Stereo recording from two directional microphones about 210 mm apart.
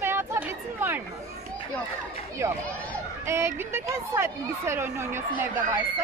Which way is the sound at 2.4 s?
15° right (ahead or behind).